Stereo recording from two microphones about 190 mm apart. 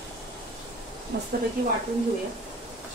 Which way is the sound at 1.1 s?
60° right (ahead or behind).